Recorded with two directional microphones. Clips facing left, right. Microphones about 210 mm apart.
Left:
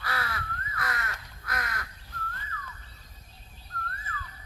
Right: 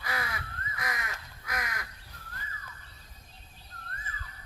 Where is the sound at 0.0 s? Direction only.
15° right (ahead or behind).